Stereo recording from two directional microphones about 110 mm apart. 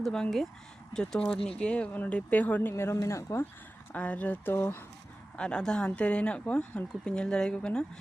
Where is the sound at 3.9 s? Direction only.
15° left (ahead or behind).